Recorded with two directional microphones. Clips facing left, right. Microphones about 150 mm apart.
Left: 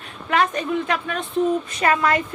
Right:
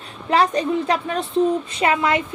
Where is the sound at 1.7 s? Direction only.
25° right (ahead or behind).